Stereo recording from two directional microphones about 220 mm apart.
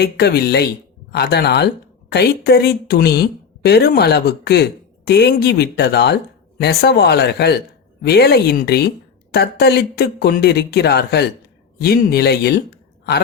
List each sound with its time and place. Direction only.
0.0 s speech: 45° left (ahead or behind)